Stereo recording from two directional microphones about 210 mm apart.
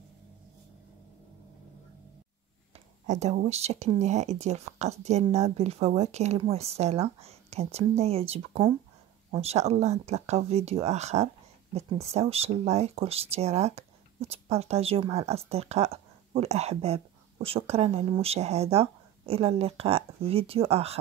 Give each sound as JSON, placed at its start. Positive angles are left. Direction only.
{"t": 3.1, "sound": "speech", "side_deg": -35}